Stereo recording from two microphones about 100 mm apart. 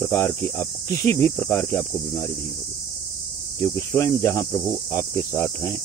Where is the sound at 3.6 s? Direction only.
25° left (ahead or behind).